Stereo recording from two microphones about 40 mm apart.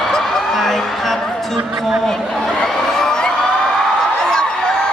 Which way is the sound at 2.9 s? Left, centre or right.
Centre.